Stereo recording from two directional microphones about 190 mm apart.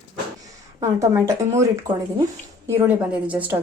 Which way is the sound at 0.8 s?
15° right (ahead or behind).